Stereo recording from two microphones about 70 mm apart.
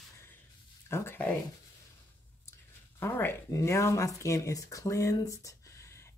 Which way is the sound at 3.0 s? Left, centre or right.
Left.